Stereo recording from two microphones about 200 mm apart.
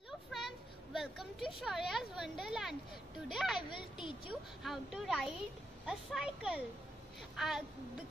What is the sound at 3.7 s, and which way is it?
Speech, 25° left (ahead or behind).